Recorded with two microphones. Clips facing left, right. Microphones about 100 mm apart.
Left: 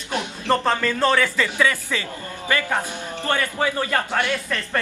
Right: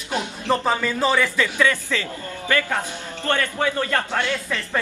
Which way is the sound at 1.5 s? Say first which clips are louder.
Right 1 dB; 15° left (ahead or behind).